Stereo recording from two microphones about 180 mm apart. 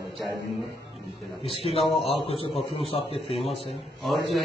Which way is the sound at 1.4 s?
30° left (ahead or behind).